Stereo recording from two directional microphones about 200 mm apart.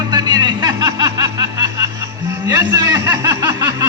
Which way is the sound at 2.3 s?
15° right (ahead or behind).